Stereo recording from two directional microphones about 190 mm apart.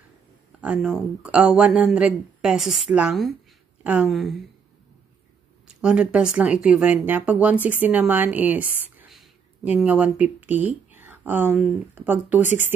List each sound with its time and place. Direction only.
0.6 s speech: 5° right (ahead or behind)
5.8 s speech: 5° right (ahead or behind)
12.4 s speech: 40° left (ahead or behind)